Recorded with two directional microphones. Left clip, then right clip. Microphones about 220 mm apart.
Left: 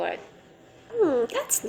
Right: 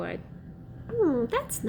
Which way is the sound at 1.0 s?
15° right (ahead or behind).